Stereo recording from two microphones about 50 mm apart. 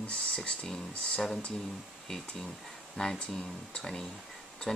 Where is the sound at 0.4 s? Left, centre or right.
Centre.